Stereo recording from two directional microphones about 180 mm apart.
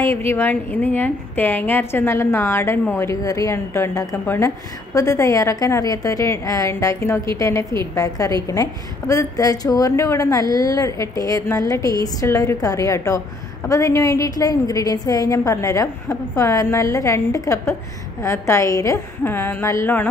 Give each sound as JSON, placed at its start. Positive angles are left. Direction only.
{"t": 0.0, "sound": "a woman's voice", "side_deg": 15}